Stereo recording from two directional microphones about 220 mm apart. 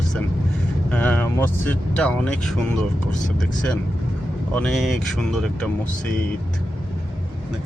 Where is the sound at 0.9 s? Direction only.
5° left (ahead or behind).